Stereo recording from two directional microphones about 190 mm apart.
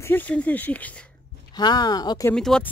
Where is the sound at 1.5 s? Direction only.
20° left (ahead or behind).